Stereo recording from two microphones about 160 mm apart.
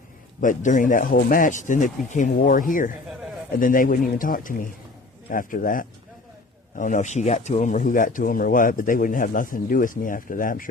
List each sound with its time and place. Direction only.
0.4 s speech: 55° left (ahead or behind)